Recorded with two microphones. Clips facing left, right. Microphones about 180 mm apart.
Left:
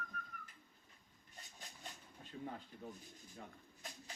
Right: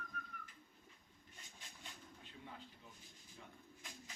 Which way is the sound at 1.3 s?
40° left (ahead or behind).